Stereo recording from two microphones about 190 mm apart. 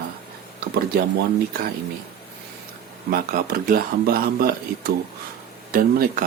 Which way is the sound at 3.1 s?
50° right (ahead or behind).